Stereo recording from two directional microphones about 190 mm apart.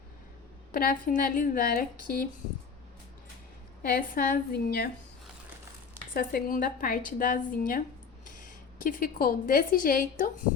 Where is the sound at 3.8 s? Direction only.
50° left (ahead or behind).